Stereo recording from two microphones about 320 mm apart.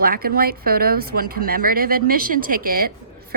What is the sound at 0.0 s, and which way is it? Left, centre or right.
Speech, right.